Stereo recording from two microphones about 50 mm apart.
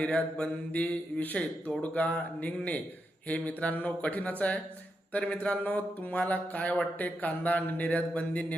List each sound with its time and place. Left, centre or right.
0.0 s speech: left
5.4 s speech: left